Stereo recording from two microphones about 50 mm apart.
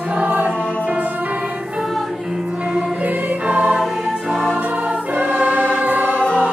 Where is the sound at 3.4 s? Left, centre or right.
Right.